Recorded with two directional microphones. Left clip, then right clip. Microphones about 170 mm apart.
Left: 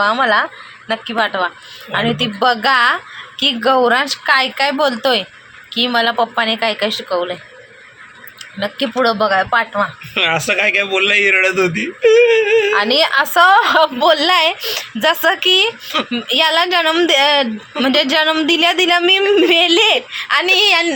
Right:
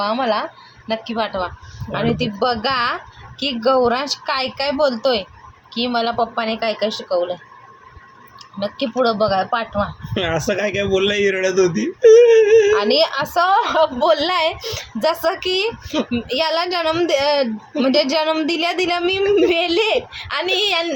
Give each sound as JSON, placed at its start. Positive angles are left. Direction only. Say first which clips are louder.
{"t": 0.0, "sound": "a woman's voice", "louder": "left 6 dB", "side_deg": 0}
{"t": 8.5, "sound": "a woman's voice", "louder": "left 3 dB", "side_deg": 5}
{"t": 10.2, "sound": "speech", "louder": "left 5 dB", "side_deg": -30}
{"t": 12.7, "sound": "a woman's voice", "louder": "left 3 dB", "side_deg": 5}